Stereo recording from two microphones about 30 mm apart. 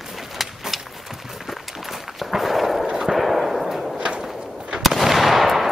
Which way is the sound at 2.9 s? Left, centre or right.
Centre.